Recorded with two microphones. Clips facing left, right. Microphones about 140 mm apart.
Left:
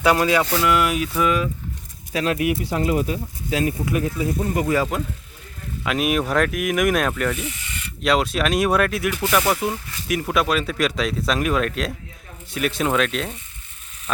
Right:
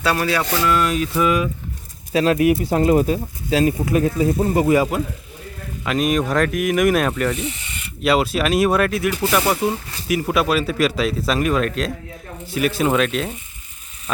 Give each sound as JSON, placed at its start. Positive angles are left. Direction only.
{"t": 0.0, "sound": "speech", "side_deg": 15}
{"t": 2.1, "sound": "speech", "side_deg": -30}
{"t": 4.9, "sound": "speech", "side_deg": -5}
{"t": 7.3, "sound": "mechanisms", "side_deg": -25}
{"t": 8.0, "sound": "speech", "side_deg": -5}